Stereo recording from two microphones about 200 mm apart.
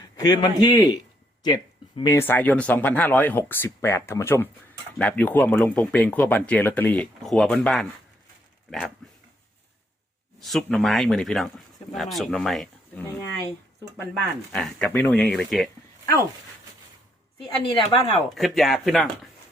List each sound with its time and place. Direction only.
0.2 s speech: 20° left (ahead or behind); by 7.9 s centre (ahead or behind)
9.0 s dog: 5° left (ahead or behind)
10.4 s speech: centre (ahead or behind)
17.6 s a woman's voice: 25° left (ahead or behind)
18.3 s speech: centre (ahead or behind)